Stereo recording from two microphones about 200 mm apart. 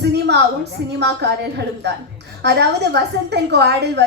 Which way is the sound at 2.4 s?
55° right (ahead or behind).